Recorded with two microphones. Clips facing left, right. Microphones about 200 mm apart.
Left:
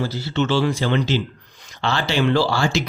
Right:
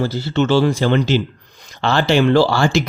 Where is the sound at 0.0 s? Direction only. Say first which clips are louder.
Right 4 dB; 50° right (ahead or behind).